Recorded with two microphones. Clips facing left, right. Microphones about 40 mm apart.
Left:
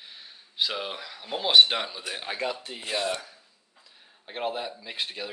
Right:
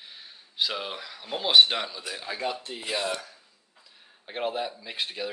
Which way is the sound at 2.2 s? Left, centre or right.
Left.